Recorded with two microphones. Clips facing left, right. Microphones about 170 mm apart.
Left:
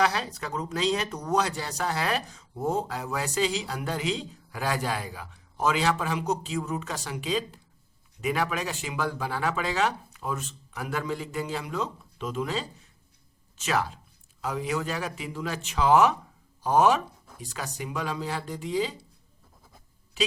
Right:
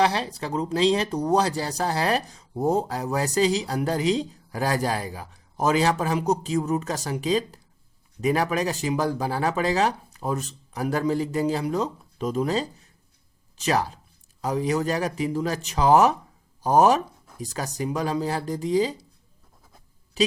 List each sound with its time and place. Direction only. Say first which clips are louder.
0.0 s speech: right 4 dB; 30° right (ahead or behind)